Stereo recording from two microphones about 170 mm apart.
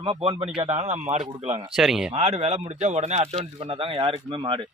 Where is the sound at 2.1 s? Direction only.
35° right (ahead or behind).